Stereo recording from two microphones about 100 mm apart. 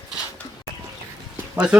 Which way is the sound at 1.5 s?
10° right (ahead or behind).